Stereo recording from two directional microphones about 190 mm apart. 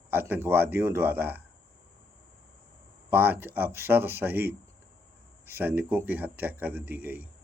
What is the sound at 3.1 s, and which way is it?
Speech, 10° right (ahead or behind).